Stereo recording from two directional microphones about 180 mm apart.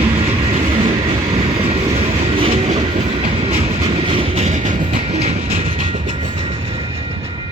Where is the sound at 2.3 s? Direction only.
30° right (ahead or behind).